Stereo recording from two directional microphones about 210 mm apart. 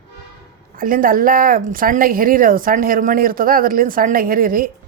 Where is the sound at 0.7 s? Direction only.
40° right (ahead or behind).